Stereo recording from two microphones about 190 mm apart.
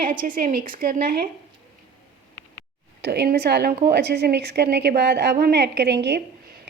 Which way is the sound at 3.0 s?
60° right (ahead or behind).